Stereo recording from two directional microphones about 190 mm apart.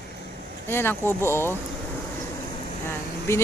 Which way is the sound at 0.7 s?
10° left (ahead or behind).